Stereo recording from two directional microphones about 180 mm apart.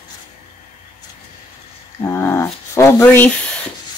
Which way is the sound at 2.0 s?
15° left (ahead or behind).